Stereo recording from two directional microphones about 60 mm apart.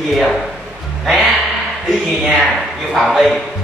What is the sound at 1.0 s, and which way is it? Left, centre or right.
Music, centre.